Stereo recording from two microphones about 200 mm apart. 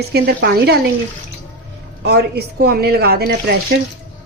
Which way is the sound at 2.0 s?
55° right (ahead or behind).